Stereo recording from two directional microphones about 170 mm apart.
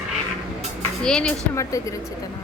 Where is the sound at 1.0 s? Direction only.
5° left (ahead or behind).